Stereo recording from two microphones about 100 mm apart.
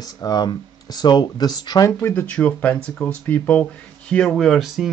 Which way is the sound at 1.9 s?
25° left (ahead or behind).